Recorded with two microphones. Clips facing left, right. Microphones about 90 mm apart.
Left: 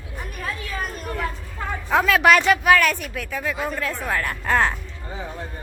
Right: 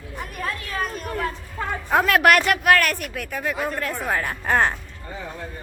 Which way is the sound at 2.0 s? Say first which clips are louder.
Left 2 dB; centre (ahead or behind).